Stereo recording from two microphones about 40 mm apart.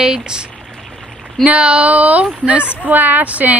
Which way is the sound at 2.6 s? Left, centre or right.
Left.